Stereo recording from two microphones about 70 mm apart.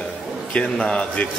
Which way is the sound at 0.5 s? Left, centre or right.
Centre.